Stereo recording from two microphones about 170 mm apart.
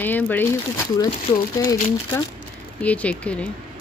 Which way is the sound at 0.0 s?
10° left (ahead or behind).